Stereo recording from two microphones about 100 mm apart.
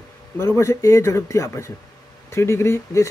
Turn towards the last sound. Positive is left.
turn(degrees=25)  # may be behind; listen again after turning